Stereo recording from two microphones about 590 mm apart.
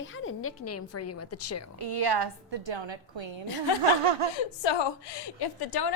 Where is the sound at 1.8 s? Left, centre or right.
Right.